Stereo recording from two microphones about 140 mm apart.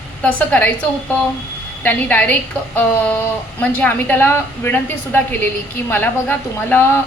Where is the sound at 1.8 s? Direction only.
10° left (ahead or behind).